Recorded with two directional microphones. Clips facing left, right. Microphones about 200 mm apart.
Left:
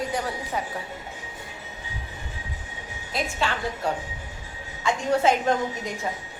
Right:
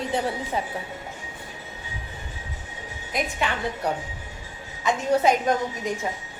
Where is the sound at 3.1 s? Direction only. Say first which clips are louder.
Right 1 dB; 20° right (ahead or behind).